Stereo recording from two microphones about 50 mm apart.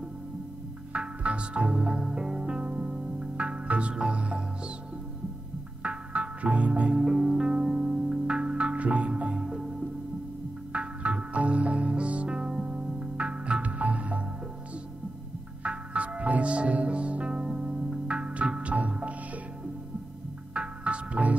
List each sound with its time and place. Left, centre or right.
0.9 s music: right
5.8 s music: right
7.0 s music: centre
10.7 s music: right
15.6 s music: right
20.5 s music: right